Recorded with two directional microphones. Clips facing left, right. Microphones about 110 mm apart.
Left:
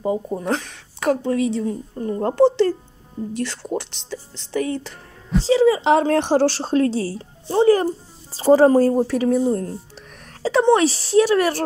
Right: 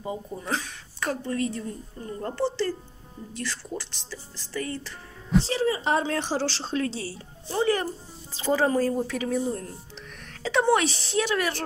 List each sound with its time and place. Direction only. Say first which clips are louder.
0.0 s a woman's voice: left 10 dB; 45° left (ahead or behind); by 2.1 s 85° left
2.1 s a woman's voice: left 11 dB; 65° left (ahead or behind)
4.1 s music: left 9 dB; 75° left (ahead or behind)
5.6 s speech: left 9 dB; 90° left; by 9.4 s 35° left (ahead or behind)
10.4 s a woman's voice: left 7 dB; 30° left (ahead or behind)
11.1 s speech: left 10 dB; 40° left (ahead or behind)